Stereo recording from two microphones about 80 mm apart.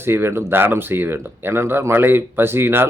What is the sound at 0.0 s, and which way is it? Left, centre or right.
Speech, right.